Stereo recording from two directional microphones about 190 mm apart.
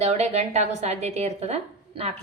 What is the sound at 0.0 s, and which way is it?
A woman's voice, 35° right (ahead or behind).